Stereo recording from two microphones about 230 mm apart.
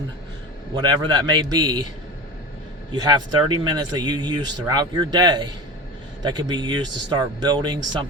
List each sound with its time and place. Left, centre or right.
0.8 s speech: centre
2.9 s speech: centre